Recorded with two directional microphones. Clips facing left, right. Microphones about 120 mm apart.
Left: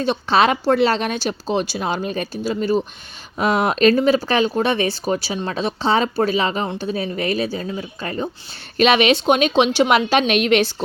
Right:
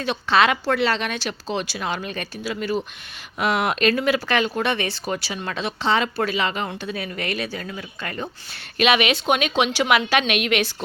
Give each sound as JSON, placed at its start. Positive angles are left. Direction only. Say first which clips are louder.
{"t": 0.0, "sound": "a woman's voice", "louder": "left 3 dB", "side_deg": 35}